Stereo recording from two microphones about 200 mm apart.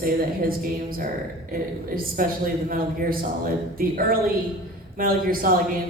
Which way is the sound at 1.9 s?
45° right (ahead or behind).